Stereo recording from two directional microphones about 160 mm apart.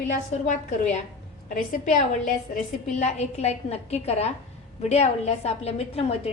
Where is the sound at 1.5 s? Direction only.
50° left (ahead or behind).